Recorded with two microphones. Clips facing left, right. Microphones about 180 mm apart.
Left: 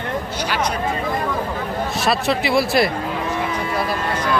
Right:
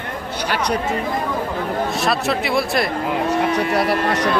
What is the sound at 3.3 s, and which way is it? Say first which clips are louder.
Speech: right 5 dB; 70° right (ahead or behind).